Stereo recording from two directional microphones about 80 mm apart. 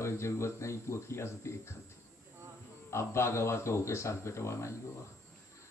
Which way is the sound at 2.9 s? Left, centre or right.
Left.